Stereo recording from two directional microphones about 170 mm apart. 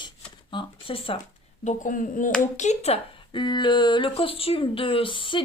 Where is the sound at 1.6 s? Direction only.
50° left (ahead or behind).